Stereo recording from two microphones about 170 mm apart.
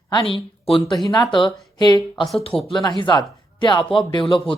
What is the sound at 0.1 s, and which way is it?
Speech, 30° left (ahead or behind).